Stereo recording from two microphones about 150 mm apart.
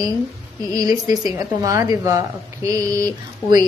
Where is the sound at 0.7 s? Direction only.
25° right (ahead or behind).